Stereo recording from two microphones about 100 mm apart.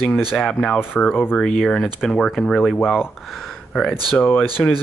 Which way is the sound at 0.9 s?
10° left (ahead or behind).